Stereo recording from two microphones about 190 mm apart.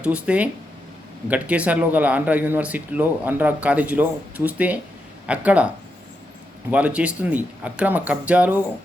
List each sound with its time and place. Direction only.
0.0 s speech: 5° right (ahead or behind)